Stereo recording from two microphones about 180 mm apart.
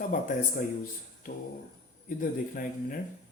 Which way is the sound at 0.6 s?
50° left (ahead or behind).